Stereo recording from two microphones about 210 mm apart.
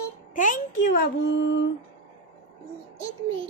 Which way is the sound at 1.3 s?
55° left (ahead or behind).